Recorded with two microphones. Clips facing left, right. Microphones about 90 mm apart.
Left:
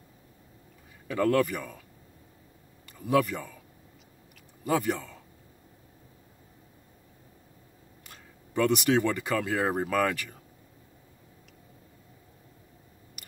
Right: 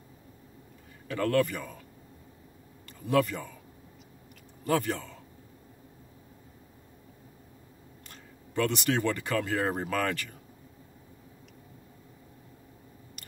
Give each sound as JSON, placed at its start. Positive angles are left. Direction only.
{"t": 1.0, "sound": "a man's voice", "side_deg": 10}
{"t": 3.1, "sound": "a man's voice", "side_deg": 10}
{"t": 4.6, "sound": "a man's voice", "side_deg": 10}
{"t": 8.1, "sound": "speech", "side_deg": 10}